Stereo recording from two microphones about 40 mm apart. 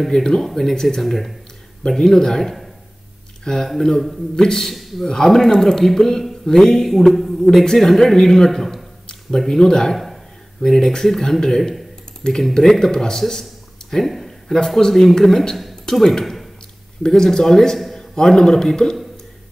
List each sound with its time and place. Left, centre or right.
0.0 s speech: centre
9.6 s speech: centre
9.9 s speech: centre
13.2 s a sound: centre
14.8 s speech: centre
15.7 s a sound: centre
17.0 s a man's voice: centre